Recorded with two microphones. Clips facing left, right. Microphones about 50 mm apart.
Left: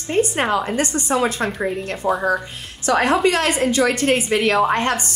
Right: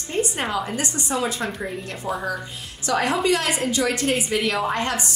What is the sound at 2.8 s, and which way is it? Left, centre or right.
A woman's voice, left.